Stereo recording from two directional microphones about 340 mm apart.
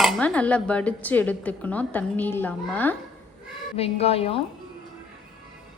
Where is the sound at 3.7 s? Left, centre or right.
Centre.